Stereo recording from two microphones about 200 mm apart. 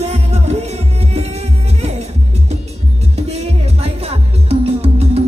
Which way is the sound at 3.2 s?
35° right (ahead or behind).